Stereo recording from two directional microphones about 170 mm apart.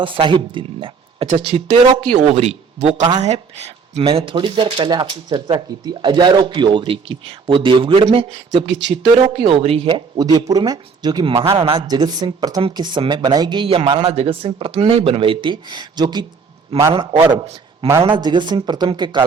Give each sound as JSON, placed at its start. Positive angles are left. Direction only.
{"t": 0.0, "sound": "speech", "side_deg": -30}
{"t": 2.1, "sound": "speech", "side_deg": -40}
{"t": 10.2, "sound": "speech", "side_deg": -25}